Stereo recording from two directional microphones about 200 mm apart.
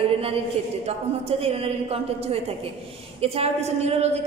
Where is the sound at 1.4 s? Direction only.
30° right (ahead or behind).